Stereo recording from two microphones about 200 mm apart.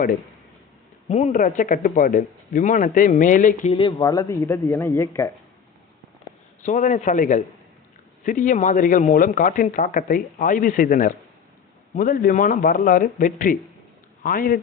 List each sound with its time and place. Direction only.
1.0 s speech: 35° left (ahead or behind)
3.7 s speech: 25° left (ahead or behind)
6.6 s speech: 40° left (ahead or behind)